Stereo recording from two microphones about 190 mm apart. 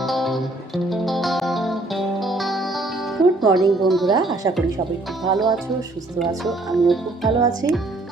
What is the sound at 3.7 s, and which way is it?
Speech, centre (ahead or behind).